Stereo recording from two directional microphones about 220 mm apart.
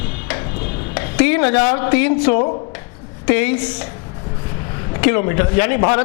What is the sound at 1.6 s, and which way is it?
Speech, 30° left (ahead or behind).